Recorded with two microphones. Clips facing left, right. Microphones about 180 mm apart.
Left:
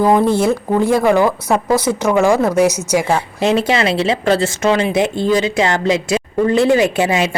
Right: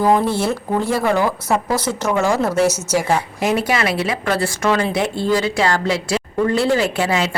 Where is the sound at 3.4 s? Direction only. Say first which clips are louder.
Left 5 dB; 25° left (ahead or behind).